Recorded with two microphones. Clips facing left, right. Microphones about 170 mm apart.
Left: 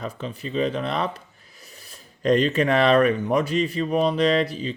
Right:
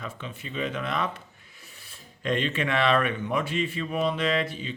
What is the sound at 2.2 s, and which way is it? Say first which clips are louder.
Speech: left 8 dB; 40° left (ahead or behind).